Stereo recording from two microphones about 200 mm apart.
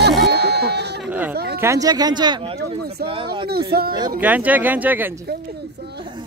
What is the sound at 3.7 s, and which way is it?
Speech, 50° right (ahead or behind).